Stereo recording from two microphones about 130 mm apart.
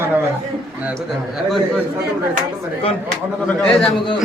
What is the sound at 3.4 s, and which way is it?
Speech, 5° left (ahead or behind).